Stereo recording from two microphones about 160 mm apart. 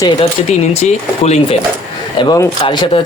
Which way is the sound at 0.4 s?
40° left (ahead or behind).